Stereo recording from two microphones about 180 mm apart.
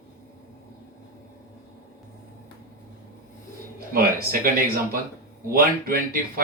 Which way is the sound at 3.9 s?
55° right (ahead or behind).